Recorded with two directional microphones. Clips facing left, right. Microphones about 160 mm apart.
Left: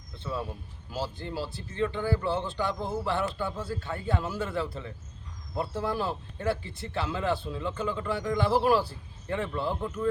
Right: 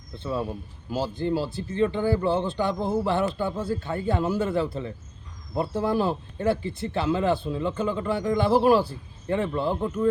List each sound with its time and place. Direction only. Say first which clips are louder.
0.2 s speech: right 6 dB; 25° right (ahead or behind)